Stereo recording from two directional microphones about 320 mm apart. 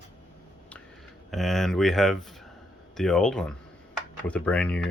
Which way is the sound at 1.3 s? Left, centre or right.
Centre.